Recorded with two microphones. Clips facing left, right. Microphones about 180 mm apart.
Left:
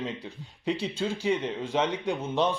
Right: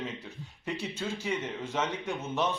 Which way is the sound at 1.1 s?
10° left (ahead or behind).